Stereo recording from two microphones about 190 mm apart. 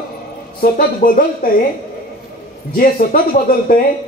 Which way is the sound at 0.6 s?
50° left (ahead or behind).